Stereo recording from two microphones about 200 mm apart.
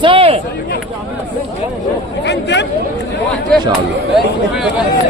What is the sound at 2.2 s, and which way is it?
Speech, 60° left (ahead or behind).